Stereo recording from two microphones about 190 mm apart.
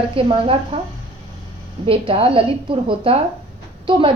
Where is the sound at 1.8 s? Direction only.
30° right (ahead or behind).